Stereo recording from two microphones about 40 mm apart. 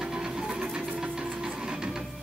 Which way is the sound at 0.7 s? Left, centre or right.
Right.